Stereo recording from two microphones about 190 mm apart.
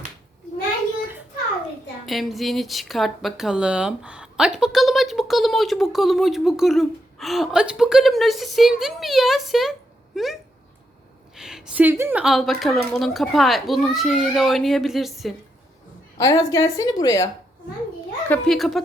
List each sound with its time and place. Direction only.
2.0 s speech: centre (ahead or behind)
11.3 s speech: 5° right (ahead or behind)
16.1 s a woman's voice: 15° left (ahead or behind)
18.3 s speech: centre (ahead or behind)